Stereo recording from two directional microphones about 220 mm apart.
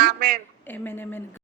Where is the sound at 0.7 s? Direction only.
10° left (ahead or behind).